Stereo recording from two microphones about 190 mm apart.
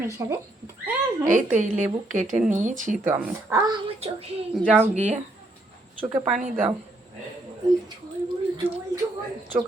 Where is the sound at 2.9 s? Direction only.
10° right (ahead or behind).